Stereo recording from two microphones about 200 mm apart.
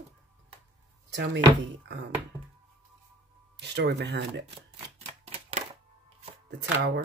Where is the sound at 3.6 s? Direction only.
60° right (ahead or behind).